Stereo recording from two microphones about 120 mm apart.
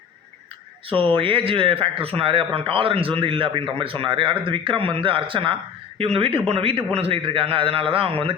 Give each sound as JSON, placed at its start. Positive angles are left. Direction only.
{"t": 0.9, "sound": "speech", "side_deg": -50}